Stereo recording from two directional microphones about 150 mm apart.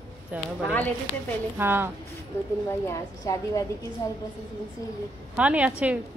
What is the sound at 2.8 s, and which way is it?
Speech, 20° left (ahead or behind).